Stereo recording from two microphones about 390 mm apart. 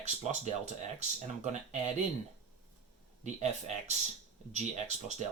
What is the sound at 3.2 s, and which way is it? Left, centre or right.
Speech, centre.